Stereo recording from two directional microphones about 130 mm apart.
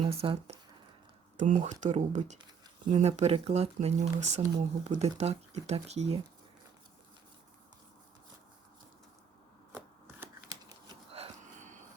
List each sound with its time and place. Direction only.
0.0 s speech: 50° right (ahead or behind)
1.4 s speech: 65° right (ahead or behind)
2.4 s a sound: 40° right (ahead or behind)
3.0 s speech: 55° right (ahead or behind)